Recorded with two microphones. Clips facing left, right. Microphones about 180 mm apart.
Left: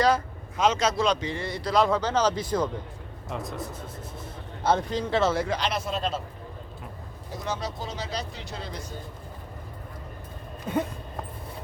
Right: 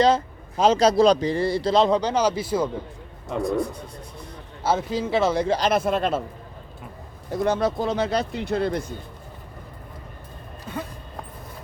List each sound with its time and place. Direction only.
0.0 s a sound: 25° right (ahead or behind)
0.6 s a man's voice: 35° right (ahead or behind); by 5.5 s 15° right (ahead or behind)
5.5 s speech: 40° right (ahead or behind); by 6.2 s 60° right (ahead or behind)
7.3 s speech: 55° right (ahead or behind)